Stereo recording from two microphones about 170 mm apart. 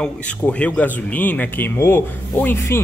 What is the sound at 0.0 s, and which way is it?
A man's voice, 5° left (ahead or behind).